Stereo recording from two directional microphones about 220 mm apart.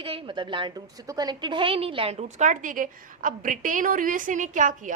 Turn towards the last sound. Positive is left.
turn(degrees=-35)  # may be behind; listen again after turning